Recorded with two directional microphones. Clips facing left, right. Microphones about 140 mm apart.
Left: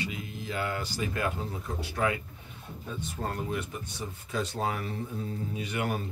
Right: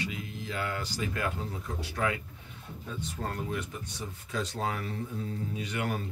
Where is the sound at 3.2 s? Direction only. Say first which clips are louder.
Left 2 dB; 25° left (ahead or behind).